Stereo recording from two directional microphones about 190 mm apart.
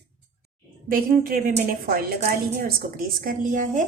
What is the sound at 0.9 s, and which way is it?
Speech, 50° right (ahead or behind).